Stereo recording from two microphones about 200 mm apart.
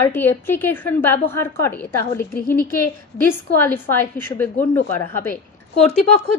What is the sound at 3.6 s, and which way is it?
A woman's voice, 10° left (ahead or behind).